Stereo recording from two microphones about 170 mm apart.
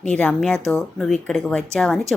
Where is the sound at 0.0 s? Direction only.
5° left (ahead or behind).